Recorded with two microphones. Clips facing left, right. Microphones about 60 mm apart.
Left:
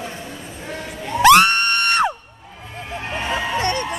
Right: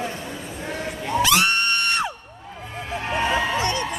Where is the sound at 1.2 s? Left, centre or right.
Left.